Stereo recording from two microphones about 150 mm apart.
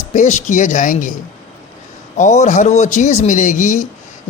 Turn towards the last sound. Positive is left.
turn(degrees=55)  # may be behind; listen again after turning